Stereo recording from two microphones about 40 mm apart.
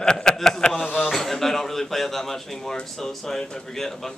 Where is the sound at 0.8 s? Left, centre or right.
Left.